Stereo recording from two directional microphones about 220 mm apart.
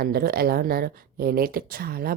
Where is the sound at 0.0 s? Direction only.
45° right (ahead or behind).